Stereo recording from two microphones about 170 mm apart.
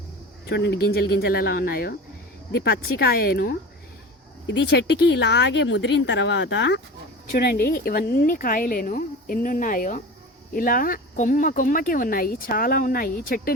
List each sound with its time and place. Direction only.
0.4 s speech: 85° left; by 3.5 s 60° left (ahead or behind)
4.4 s speech: 85° left
7.3 s speech: 65° left (ahead or behind)